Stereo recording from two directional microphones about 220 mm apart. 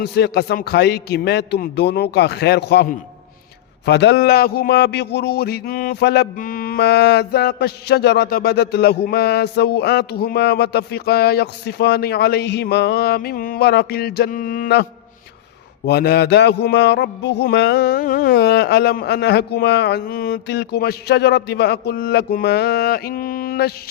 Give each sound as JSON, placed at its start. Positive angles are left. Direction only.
{"t": 0.0, "sound": "a man's voice", "side_deg": 45}
{"t": 3.8, "sound": "a man's voice", "side_deg": 50}
{"t": 15.9, "sound": "a man's voice", "side_deg": 45}